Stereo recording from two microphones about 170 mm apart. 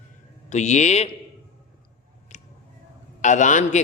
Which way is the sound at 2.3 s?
45° left (ahead or behind).